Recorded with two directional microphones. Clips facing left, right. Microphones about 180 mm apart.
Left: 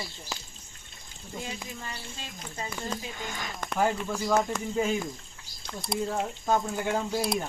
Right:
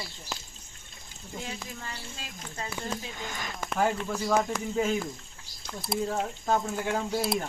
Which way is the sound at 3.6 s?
Centre (ahead or behind).